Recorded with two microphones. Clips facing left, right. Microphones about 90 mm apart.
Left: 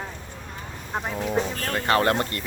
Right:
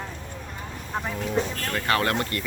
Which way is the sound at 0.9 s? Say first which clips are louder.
Left 1 dB; 15° left (ahead or behind).